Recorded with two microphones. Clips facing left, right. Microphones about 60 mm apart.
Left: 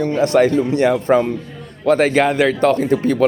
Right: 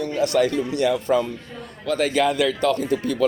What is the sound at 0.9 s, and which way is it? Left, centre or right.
Speech, left.